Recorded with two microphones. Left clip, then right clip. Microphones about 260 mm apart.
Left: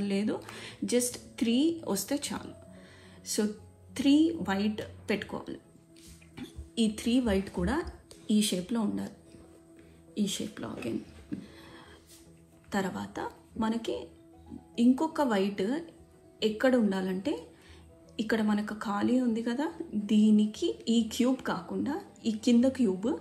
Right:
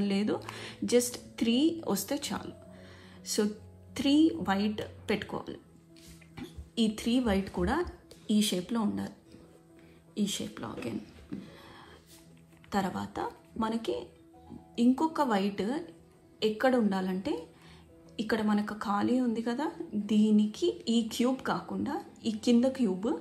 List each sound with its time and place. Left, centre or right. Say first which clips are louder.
0.0 s a woman's voice: right 1 dB; right
10.1 s a woman's voice: left 1 dB; right
11.5 s a sound: even; right
12.6 s a woman's voice: right 1 dB; right